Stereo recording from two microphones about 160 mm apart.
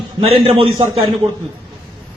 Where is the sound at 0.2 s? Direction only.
35° right (ahead or behind).